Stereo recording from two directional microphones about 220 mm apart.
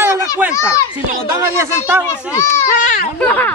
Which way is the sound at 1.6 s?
10° right (ahead or behind).